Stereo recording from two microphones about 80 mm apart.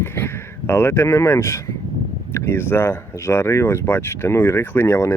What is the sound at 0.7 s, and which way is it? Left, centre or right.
Speech, left.